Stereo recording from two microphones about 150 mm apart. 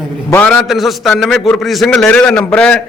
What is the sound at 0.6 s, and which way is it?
A man's voice, centre (ahead or behind).